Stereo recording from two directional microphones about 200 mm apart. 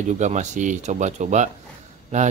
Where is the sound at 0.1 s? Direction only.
35° right (ahead or behind).